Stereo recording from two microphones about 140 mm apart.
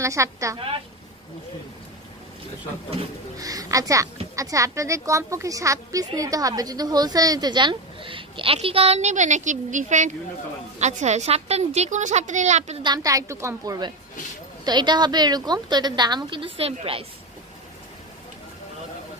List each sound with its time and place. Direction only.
0.0 s a woman's voice: 20° right (ahead or behind)
3.3 s a woman's voice: 25° right (ahead or behind); by 12.7 s 55° right (ahead or behind)
12.8 s a woman's voice: 25° right (ahead or behind)
14.6 s a woman's voice: 30° right (ahead or behind)